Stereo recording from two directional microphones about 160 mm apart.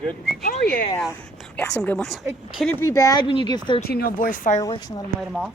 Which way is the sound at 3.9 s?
70° left (ahead or behind).